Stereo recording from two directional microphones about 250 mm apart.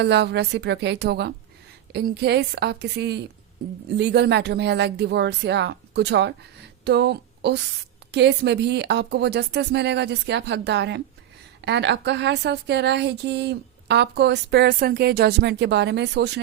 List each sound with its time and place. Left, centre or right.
0.0 s a woman's voice: right